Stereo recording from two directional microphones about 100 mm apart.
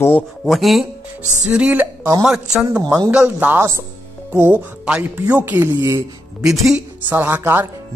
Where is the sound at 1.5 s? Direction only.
15° right (ahead or behind).